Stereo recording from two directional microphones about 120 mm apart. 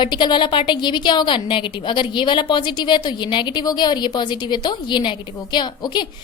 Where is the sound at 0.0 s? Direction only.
40° left (ahead or behind).